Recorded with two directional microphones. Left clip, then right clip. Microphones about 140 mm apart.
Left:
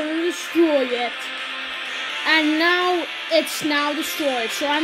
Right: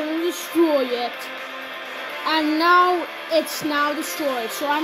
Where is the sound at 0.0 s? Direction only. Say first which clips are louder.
Left 1 dB; 35° right (ahead or behind).